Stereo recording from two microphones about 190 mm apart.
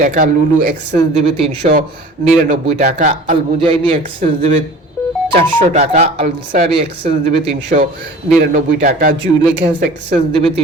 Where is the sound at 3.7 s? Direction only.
30° right (ahead or behind).